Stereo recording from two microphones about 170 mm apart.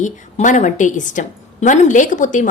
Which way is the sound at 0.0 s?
45° left (ahead or behind).